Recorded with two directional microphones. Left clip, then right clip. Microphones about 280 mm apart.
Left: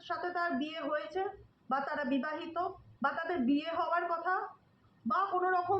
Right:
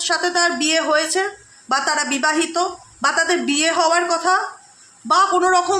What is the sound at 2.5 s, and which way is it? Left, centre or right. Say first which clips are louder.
Speech: right 15 dB; right.